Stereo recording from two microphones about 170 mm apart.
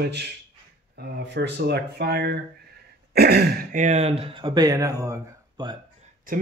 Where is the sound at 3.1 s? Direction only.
70° right (ahead or behind).